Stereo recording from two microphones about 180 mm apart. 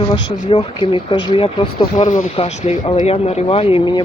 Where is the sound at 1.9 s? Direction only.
45° left (ahead or behind).